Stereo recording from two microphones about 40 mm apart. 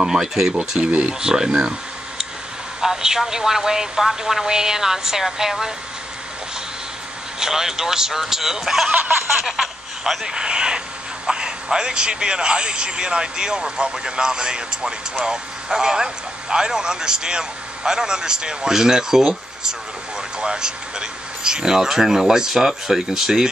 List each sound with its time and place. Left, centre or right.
0.0 s speech: centre
1.6 s a sound: centre
2.8 s speech: centre
7.3 s speech: centre
10.3 s speech: centre